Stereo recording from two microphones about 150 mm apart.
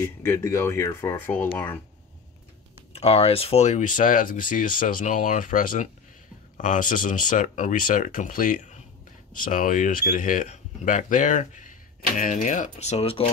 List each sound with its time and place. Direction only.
0.0 s speech: 15° left (ahead or behind)
2.9 s speech: 45° left (ahead or behind)